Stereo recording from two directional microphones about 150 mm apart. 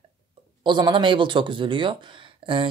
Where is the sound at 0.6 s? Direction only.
30° right (ahead or behind).